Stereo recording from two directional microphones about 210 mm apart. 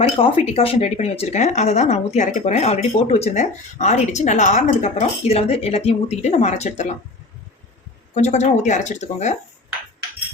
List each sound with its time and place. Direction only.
0.2 s a woman's voice: 25° left (ahead or behind)
8.1 s a woman's voice: 35° left (ahead or behind)